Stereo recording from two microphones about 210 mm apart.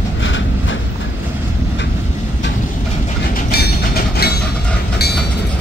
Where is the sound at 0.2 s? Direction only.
65° left (ahead or behind).